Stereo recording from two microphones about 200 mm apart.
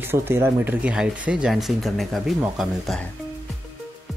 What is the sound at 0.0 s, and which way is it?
Speech, 10° right (ahead or behind).